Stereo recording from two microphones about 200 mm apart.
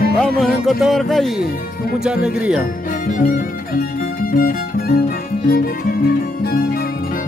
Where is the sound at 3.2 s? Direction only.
45° left (ahead or behind).